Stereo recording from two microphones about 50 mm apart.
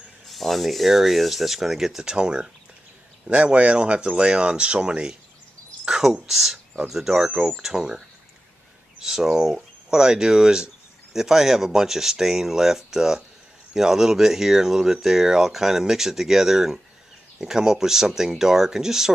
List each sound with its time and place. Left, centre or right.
0.3 s speech: centre
7.2 s speech: right
7.5 s speech: centre
9.0 s speech: centre